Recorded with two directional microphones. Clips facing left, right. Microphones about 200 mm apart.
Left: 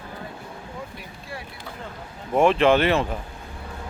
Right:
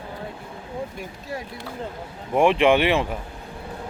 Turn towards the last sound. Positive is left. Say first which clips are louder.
# even
turn(degrees=-15)  # may be behind; listen again after turning